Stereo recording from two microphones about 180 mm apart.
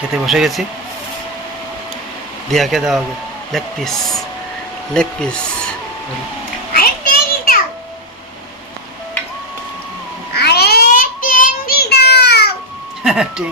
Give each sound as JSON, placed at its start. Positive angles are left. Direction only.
{"t": 0.1, "sound": "speech", "side_deg": 0}
{"t": 2.5, "sound": "speech", "side_deg": 0}
{"t": 6.7, "sound": "children playing", "side_deg": 55}
{"t": 10.3, "sound": "child singing", "side_deg": 65}
{"t": 13.0, "sound": "speech", "side_deg": -5}